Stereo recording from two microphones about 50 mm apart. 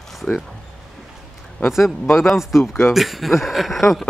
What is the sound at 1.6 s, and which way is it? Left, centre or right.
Speech, left.